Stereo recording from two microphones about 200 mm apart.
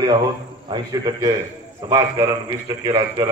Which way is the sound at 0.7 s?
20° right (ahead or behind).